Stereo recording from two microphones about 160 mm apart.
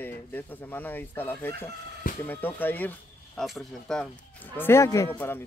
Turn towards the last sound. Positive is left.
turn(degrees=15)  # may be behind; listen again after turning